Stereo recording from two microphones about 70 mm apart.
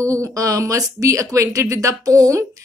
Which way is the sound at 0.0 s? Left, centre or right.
Right.